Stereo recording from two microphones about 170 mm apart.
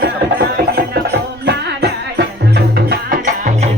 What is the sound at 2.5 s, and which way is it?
Music, 60° right (ahead or behind).